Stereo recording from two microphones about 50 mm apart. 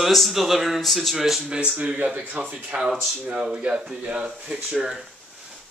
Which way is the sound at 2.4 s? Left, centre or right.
Centre.